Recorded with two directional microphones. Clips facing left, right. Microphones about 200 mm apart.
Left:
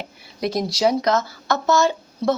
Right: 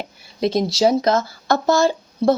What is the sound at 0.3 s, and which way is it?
Speech, 25° right (ahead or behind).